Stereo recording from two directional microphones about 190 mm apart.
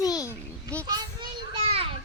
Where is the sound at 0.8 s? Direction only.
25° right (ahead or behind).